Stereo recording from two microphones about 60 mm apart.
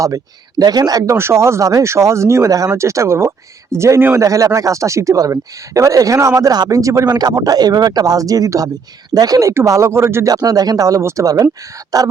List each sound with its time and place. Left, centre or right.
0.7 s speech: right
1.1 s speech: right
2.4 s speech: right
2.7 s speech: right
4.1 s speech: right
9.6 s speech: right
10.2 s speech: right
11.9 s speech: right